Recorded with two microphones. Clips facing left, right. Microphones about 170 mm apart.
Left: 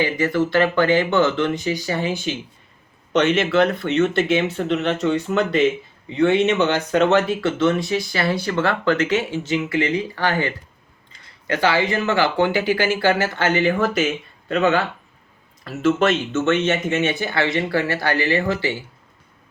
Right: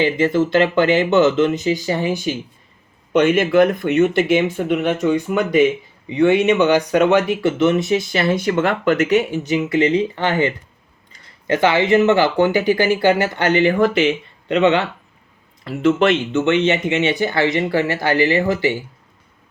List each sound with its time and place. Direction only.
0.0 s speech: 20° right (ahead or behind)